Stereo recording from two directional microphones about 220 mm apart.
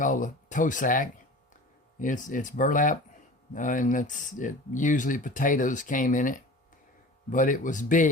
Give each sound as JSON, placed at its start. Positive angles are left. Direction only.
{"t": 0.0, "sound": "speech", "side_deg": 35}